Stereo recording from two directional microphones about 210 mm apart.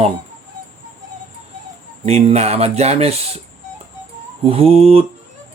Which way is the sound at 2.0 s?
30° right (ahead or behind).